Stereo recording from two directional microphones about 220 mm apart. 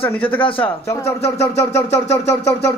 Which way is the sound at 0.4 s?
25° left (ahead or behind).